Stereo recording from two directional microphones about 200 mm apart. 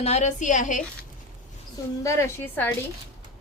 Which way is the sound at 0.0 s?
35° left (ahead or behind).